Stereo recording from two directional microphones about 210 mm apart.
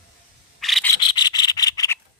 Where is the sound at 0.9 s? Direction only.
20° left (ahead or behind).